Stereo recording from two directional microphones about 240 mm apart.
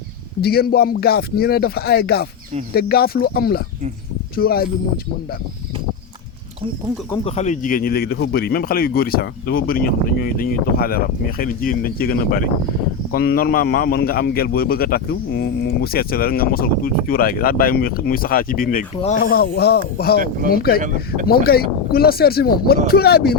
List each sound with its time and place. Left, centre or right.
0.4 s a man's voice: left
7.3 s a man's voice: left
20.1 s speech: right
20.5 s a man's voice: left